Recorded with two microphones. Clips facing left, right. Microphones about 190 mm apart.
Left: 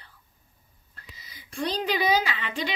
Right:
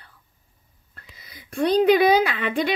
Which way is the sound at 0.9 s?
55° right (ahead or behind).